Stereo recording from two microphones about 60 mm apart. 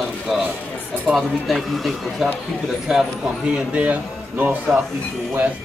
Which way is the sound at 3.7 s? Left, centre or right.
Right.